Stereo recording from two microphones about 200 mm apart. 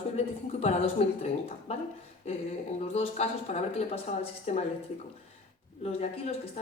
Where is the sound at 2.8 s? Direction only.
30° left (ahead or behind).